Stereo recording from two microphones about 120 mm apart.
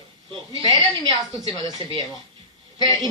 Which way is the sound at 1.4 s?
45° right (ahead or behind).